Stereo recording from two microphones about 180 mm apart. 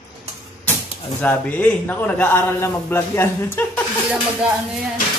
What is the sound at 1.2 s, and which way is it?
A man's voice, 10° left (ahead or behind).